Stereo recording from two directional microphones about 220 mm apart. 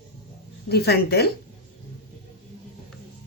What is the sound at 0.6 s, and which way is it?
Speech, 45° left (ahead or behind).